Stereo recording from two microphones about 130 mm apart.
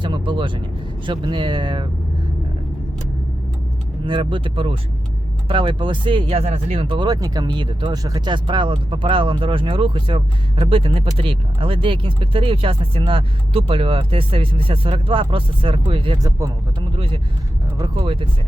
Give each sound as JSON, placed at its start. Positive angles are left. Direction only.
{"t": 0.0, "sound": "vehicle", "side_deg": -40}
{"t": 1.0, "sound": "speech", "side_deg": -35}
{"t": 4.0, "sound": "speech", "side_deg": -40}
{"t": 16.1, "sound": "speech", "side_deg": -30}
{"t": 17.9, "sound": "speech", "side_deg": -45}